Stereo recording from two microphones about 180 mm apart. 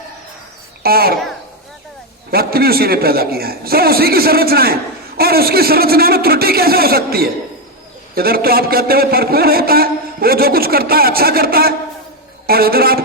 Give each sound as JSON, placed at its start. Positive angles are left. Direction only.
{"t": 0.8, "sound": "speech", "side_deg": -60}
{"t": 2.3, "sound": "a man's voice", "side_deg": -60}